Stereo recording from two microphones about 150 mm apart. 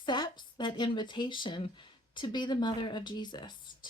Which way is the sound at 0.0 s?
30° left (ahead or behind).